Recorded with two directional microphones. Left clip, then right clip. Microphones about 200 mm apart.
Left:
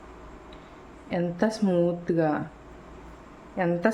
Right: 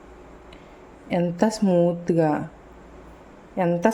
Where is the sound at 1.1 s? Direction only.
15° right (ahead or behind).